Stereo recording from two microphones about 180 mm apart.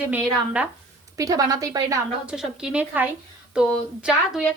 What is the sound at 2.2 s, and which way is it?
A woman's voice, 5° right (ahead or behind).